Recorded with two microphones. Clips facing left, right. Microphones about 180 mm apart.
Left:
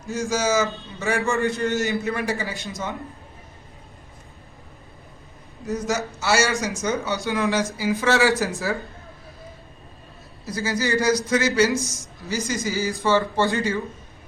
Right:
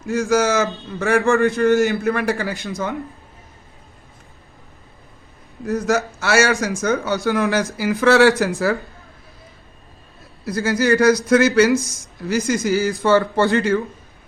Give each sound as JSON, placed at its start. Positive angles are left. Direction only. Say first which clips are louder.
{"t": 0.1, "sound": "a man's voice", "louder": "right 5 dB", "side_deg": -60}
{"t": 5.6, "sound": "a man's voice", "louder": "right 6 dB", "side_deg": -60}
{"t": 10.4, "sound": "a man's voice", "louder": "right 6 dB", "side_deg": -60}